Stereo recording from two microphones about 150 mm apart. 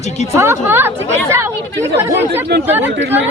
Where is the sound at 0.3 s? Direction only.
15° right (ahead or behind).